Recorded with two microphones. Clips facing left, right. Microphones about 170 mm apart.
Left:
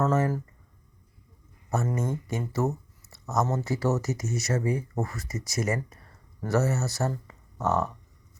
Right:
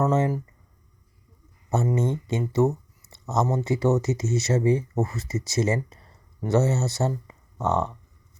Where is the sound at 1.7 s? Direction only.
20° right (ahead or behind).